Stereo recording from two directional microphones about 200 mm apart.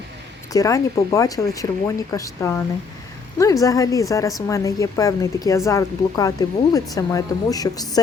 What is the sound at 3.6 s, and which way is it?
Speech, 15° left (ahead or behind).